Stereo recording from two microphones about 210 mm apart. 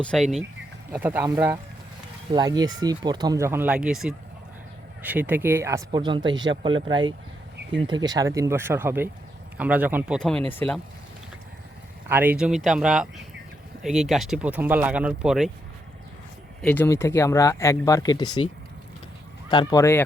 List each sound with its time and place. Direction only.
0.0 s speech: centre (ahead or behind)
10.2 s speech: 5° left (ahead or behind)
12.0 s speech: 10° right (ahead or behind)
16.6 s speech: 5° left (ahead or behind)
19.5 s speech: 20° left (ahead or behind)